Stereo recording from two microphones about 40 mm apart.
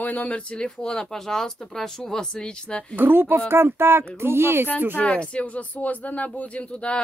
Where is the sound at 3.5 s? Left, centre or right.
Right.